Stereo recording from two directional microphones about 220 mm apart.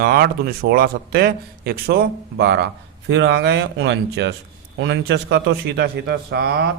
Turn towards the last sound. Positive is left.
turn(degrees=-50)  # may be behind; listen again after turning